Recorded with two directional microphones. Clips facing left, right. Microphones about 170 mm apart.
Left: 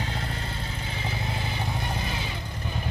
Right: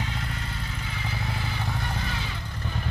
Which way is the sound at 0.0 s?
35° left (ahead or behind).